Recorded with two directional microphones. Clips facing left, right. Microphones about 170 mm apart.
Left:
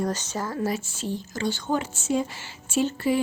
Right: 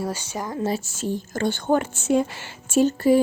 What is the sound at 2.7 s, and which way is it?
Speech, 45° right (ahead or behind).